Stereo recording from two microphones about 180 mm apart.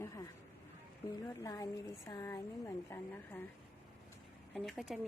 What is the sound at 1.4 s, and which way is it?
A woman's voice, 20° left (ahead or behind).